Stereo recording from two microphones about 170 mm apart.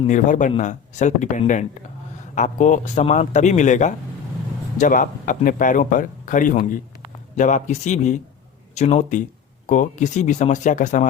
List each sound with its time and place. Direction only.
0.1 s a man's voice: 45° left (ahead or behind)